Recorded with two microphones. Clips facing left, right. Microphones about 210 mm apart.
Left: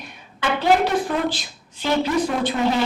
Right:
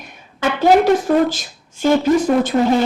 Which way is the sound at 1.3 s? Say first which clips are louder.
Even; 45° right (ahead or behind).